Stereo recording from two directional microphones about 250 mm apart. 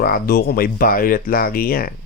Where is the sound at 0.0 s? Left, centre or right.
Left.